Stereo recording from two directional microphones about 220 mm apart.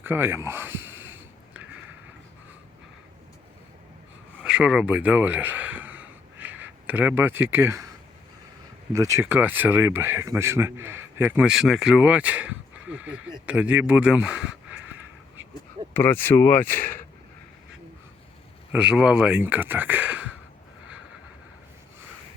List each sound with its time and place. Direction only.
0.0 s speech: 10° right (ahead or behind)
4.4 s a sound: 5° right (ahead or behind)
8.9 s speech: 15° right (ahead or behind)
15.9 s speech: 10° left (ahead or behind)
18.7 s speech: 5° right (ahead or behind)